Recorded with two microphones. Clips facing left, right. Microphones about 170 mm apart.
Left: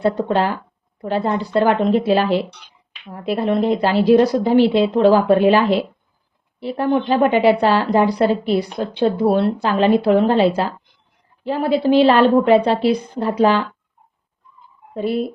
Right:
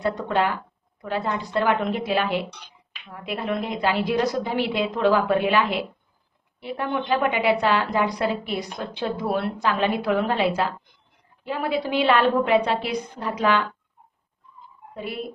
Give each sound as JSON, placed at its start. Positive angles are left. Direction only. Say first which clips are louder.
{"t": 0.0, "sound": "a woman's voice", "louder": "left 5 dB", "side_deg": 30}
{"t": 14.9, "sound": "speech", "louder": "left 12 dB", "side_deg": 35}